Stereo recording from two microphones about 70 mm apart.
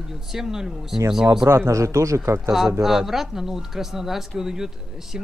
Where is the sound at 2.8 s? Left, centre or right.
Centre.